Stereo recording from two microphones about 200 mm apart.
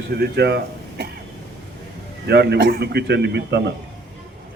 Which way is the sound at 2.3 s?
55° right (ahead or behind).